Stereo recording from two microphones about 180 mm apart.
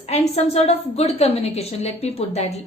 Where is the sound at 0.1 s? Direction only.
35° left (ahead or behind).